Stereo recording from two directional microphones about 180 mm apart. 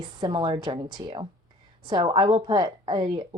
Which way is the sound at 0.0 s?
25° right (ahead or behind).